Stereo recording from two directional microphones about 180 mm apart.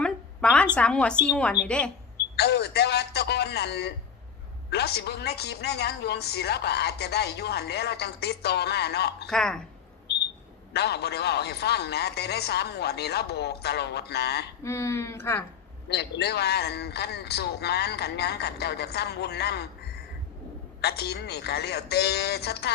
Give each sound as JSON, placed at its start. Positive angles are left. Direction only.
{"t": 0.0, "sound": "a sound", "side_deg": 5}
{"t": 0.8, "sound": "a woman's voice", "side_deg": 5}
{"t": 2.1, "sound": "a woman's voice", "side_deg": 65}
{"t": 9.3, "sound": "a woman's voice", "side_deg": 5}
{"t": 10.8, "sound": "a woman's voice", "side_deg": 65}
{"t": 14.6, "sound": "speech", "side_deg": 15}
{"t": 15.9, "sound": "a woman's voice", "side_deg": 65}